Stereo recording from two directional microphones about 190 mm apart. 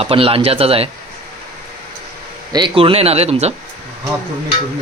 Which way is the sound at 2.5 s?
25° right (ahead or behind).